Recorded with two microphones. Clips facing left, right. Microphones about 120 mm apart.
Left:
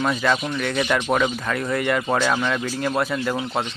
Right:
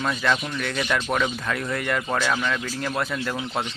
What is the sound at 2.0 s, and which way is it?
A man's voice, 15° left (ahead or behind).